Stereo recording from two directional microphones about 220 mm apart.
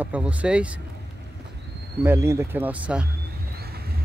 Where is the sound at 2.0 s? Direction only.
10° right (ahead or behind).